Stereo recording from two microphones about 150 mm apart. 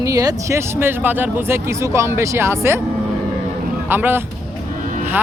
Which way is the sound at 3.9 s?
15° right (ahead or behind).